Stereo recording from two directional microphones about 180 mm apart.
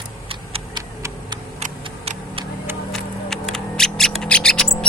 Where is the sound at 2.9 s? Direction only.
Centre (ahead or behind).